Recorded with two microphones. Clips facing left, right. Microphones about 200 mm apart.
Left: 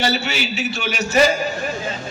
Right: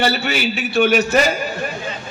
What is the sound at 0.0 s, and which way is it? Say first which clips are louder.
A man's voice: right 3 dB; 55° right (ahead or behind).